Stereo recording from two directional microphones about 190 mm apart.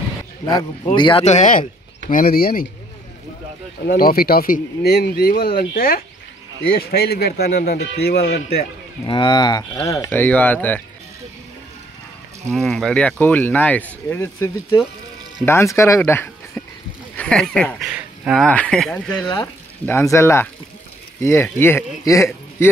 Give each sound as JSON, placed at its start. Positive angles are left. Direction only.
{"t": 0.9, "sound": "speech", "side_deg": 25}
{"t": 1.2, "sound": "speech", "side_deg": 40}
{"t": 3.8, "sound": "speech", "side_deg": 50}
{"t": 9.0, "sound": "speech", "side_deg": 25}
{"t": 12.5, "sound": "speech", "side_deg": 0}